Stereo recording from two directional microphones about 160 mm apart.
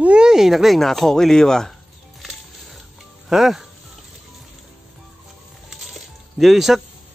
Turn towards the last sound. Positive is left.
turn(degrees=0)  # may be behind; listen again after turning